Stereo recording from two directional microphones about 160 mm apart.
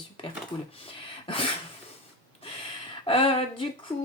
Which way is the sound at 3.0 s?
35° left (ahead or behind).